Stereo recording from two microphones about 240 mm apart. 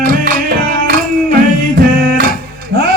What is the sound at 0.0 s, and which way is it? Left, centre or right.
Music, right.